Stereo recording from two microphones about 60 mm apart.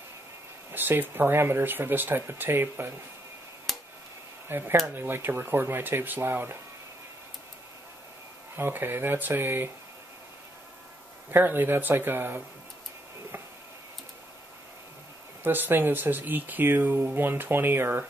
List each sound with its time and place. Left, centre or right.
0.7 s speech: right
3.7 s tick-tock: centre
4.5 s speech: right
8.5 s speech: right
11.2 s speech: right
15.4 s speech: right